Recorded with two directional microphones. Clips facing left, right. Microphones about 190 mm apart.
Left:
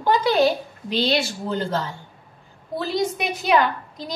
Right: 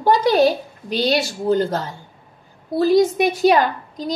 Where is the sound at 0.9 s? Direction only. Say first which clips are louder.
Right 2 dB; 45° right (ahead or behind).